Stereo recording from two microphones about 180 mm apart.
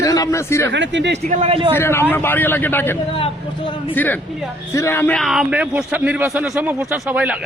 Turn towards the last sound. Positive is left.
turn(degrees=-10)  # may be behind; listen again after turning